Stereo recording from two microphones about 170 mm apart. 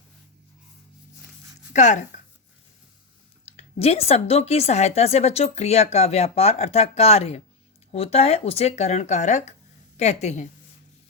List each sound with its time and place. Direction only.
1.7 s speech: 45° left (ahead or behind)
3.4 s a woman's voice: 35° left (ahead or behind)